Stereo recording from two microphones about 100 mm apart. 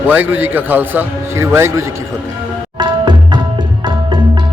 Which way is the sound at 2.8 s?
45° right (ahead or behind).